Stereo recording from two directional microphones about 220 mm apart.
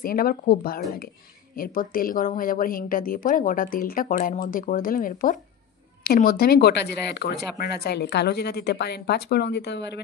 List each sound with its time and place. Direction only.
0.0 s speech: 40° left (ahead or behind)